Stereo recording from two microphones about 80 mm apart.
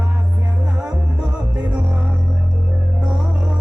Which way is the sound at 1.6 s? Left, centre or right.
Right.